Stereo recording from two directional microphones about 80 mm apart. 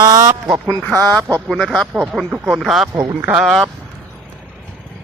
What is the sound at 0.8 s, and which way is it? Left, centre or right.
Speech, left.